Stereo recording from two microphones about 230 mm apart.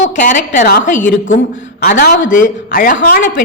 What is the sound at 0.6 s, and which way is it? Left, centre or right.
A woman's voice, left.